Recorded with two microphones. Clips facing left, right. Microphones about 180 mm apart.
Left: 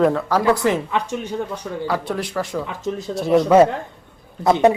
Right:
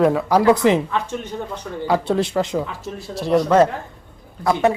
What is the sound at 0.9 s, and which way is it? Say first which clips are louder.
Speech: left 1 dB; 15° left (ahead or behind).